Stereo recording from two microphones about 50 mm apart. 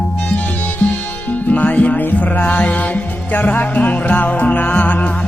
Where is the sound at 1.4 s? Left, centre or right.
Left.